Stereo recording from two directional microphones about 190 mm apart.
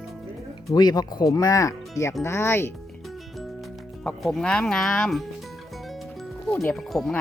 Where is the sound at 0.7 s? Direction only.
20° left (ahead or behind).